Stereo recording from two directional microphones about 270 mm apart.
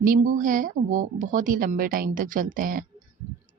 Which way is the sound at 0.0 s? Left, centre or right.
Right.